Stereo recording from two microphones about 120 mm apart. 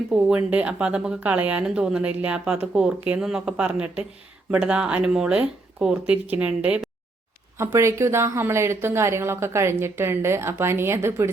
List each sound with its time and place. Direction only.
0.1 s speech: 10° right (ahead or behind)
7.6 s speech: 25° right (ahead or behind)